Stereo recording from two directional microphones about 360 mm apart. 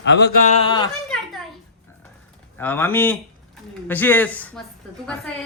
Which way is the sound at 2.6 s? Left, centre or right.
Centre.